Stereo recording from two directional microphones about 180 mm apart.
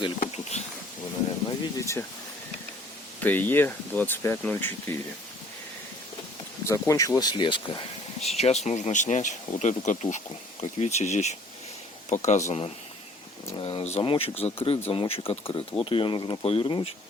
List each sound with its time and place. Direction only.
1.5 s speech: 15° left (ahead or behind)
3.2 s speech: 10° left (ahead or behind)
6.7 s speech: 15° left (ahead or behind)